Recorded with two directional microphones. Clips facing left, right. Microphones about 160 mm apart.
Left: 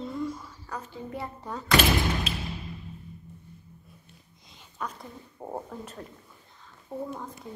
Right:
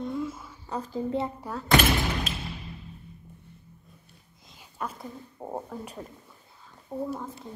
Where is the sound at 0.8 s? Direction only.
35° right (ahead or behind).